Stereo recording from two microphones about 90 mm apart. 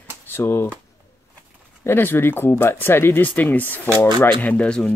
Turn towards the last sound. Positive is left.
turn(degrees=10)  # may be behind; listen again after turning